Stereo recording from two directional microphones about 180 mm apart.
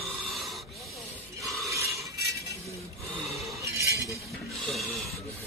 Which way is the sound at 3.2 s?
Centre (ahead or behind).